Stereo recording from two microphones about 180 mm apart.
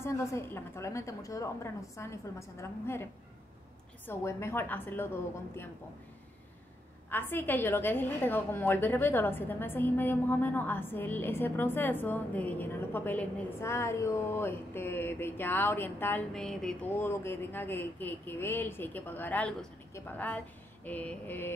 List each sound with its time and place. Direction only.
0.0 s a woman's voice: 15° left (ahead or behind)
7.1 s a woman's voice: 10° left (ahead or behind)
16.9 s a woman's voice: 15° left (ahead or behind)